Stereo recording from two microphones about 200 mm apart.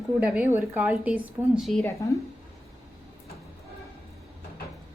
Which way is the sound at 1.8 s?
15° left (ahead or behind).